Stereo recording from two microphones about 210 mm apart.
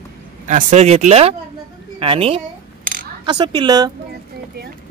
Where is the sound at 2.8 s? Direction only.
40° right (ahead or behind).